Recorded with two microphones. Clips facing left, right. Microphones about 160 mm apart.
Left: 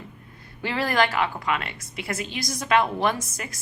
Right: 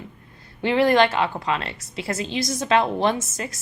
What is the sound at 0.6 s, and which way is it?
Speech, 25° right (ahead or behind).